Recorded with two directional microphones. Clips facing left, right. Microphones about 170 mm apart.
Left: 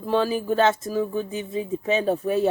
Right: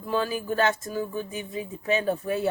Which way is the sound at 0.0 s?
30° left (ahead or behind).